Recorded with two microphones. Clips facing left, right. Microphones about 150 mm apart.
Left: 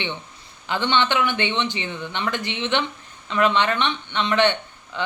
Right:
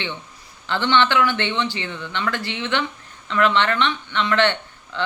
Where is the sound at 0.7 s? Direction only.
15° left (ahead or behind).